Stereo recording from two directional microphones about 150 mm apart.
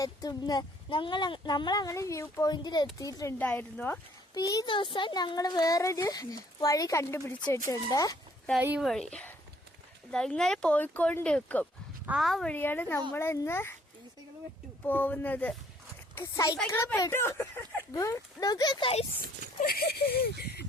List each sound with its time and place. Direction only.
0.0 s speech: 25° left (ahead or behind)
3.3 s a child's voice: 10° left (ahead or behind)
4.4 s speech: 25° left (ahead or behind)
8.8 s a child's voice: 5° left (ahead or behind)
12.0 s a child's voice: centre (ahead or behind); by 13.7 s 15° left (ahead or behind)
14.8 s a child's voice: 10° left (ahead or behind); by 19.0 s 35° left (ahead or behind)
19.6 s speech: 90° left